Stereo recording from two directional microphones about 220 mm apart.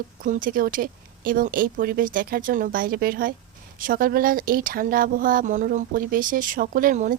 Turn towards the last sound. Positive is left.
turn(degrees=-35)  # may be behind; listen again after turning